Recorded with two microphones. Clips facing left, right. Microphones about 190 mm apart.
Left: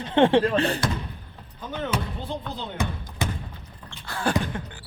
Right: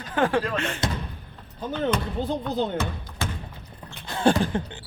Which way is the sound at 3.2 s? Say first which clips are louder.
Left 2 dB; 15° left (ahead or behind).